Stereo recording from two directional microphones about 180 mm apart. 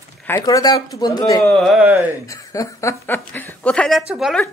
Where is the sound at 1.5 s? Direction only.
Centre (ahead or behind).